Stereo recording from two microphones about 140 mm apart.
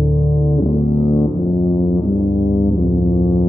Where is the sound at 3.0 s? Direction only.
30° left (ahead or behind).